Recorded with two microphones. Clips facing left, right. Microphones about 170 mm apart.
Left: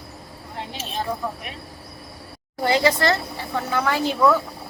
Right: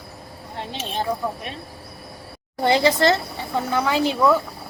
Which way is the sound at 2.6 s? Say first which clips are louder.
Right 2 dB; 25° right (ahead or behind).